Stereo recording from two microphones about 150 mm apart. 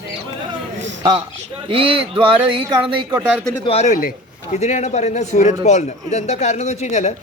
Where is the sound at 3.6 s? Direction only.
50° left (ahead or behind).